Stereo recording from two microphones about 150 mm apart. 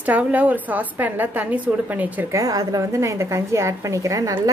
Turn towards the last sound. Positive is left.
turn(degrees=-20)  # may be behind; listen again after turning